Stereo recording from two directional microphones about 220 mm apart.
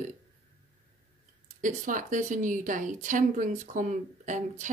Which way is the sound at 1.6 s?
35° right (ahead or behind).